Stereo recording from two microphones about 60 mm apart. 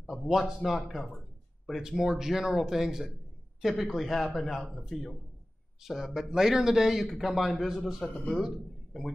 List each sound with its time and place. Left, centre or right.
0.0 s speech: centre
1.7 s a man's voice: centre